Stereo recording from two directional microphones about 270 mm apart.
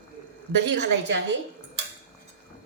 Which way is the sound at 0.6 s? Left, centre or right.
Right.